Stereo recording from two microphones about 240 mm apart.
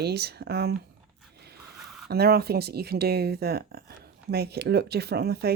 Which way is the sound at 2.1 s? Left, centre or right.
Right.